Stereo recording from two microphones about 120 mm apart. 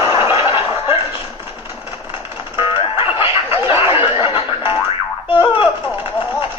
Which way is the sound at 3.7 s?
20° right (ahead or behind).